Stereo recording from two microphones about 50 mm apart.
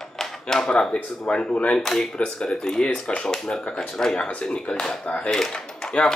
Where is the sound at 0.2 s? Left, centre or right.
Centre.